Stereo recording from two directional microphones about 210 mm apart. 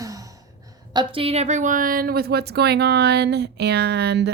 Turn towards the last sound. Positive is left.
turn(degrees=-50)  # may be behind; listen again after turning